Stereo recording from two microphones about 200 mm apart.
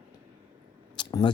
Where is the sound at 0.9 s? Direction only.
20° left (ahead or behind).